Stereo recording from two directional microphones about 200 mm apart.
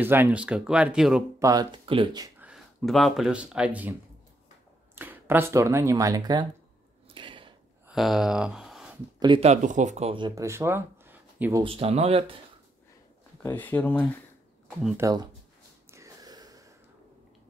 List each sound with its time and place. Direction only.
0.0 s speech: 10° right (ahead or behind)
1.4 s speech: 20° right (ahead or behind)
2.4 s speech: centre (ahead or behind)
4.9 s speech: 10° right (ahead or behind)
7.2 s a sound: 25° right (ahead or behind)
7.9 s speech: centre (ahead or behind)
9.2 s speech: 30° right (ahead or behind); by 11.6 s 10° right (ahead or behind)
11.6 s speech: 30° right (ahead or behind)
13.4 s speech: 10° left (ahead or behind)
15.0 s speech: 15° right (ahead or behind)
15.9 s a sound: 15° right (ahead or behind)